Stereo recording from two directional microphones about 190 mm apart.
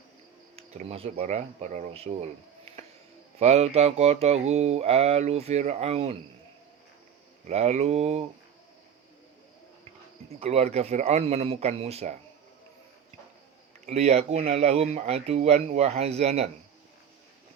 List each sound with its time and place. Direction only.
0.5 s speech: 35° right (ahead or behind)
3.3 s mantra: 35° right (ahead or behind)
7.4 s mantra: 35° right (ahead or behind)
10.4 s mantra: 35° right (ahead or behind)
13.8 s mantra: 35° right (ahead or behind)